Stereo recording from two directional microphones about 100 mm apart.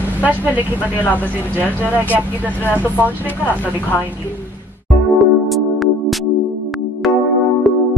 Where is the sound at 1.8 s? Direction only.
15° right (ahead or behind).